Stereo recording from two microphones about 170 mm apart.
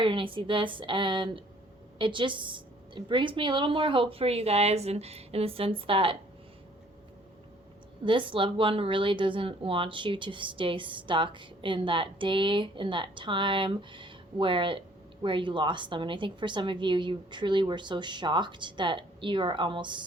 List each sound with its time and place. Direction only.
0.0 s a woman's voice: 30° right (ahead or behind)
8.0 s a woman's voice: 30° right (ahead or behind)